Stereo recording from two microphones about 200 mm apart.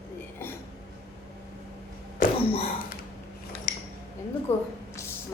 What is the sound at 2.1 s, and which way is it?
Cough, 30° left (ahead or behind).